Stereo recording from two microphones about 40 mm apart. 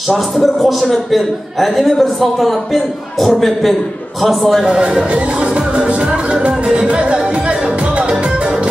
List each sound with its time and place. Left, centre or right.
0.4 s a man's voice: centre
4.6 s speech: right
5.7 s music: right